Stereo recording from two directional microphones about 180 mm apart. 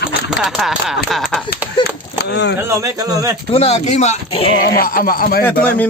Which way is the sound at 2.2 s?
70° left (ahead or behind).